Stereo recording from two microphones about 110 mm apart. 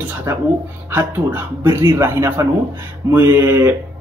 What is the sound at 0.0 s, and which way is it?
A man's voice, 20° right (ahead or behind).